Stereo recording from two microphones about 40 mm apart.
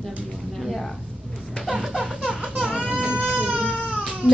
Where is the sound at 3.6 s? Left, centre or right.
Right.